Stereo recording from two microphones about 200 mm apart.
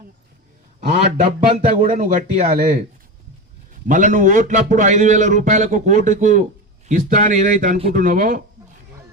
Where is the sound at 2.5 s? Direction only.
45° right (ahead or behind).